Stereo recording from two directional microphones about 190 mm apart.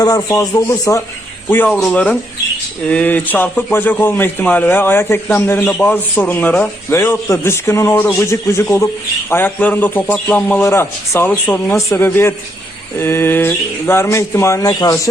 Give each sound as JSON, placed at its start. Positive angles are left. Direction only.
{"t": 0.0, "sound": "a man's voice", "side_deg": 15}